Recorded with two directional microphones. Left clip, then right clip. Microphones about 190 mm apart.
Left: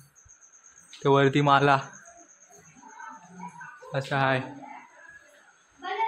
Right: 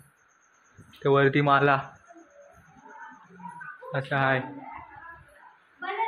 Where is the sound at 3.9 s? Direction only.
20° left (ahead or behind).